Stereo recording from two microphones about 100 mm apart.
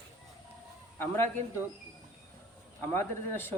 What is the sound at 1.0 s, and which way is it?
Speech, 20° left (ahead or behind).